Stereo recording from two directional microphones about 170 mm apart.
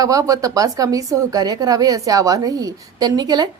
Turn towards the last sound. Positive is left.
turn(degrees=-25)  # may be behind; listen again after turning